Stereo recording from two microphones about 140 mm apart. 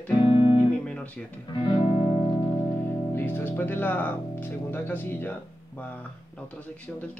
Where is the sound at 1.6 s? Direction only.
35° left (ahead or behind).